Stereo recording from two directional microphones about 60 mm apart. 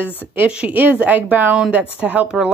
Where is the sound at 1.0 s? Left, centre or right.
Right.